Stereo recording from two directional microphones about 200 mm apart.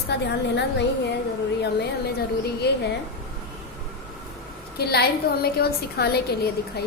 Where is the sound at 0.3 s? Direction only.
60° left (ahead or behind).